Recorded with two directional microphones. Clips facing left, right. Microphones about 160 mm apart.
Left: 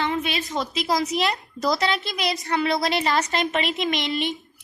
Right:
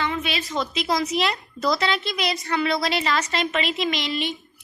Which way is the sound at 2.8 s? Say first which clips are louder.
Left 1 dB; 50° left (ahead or behind).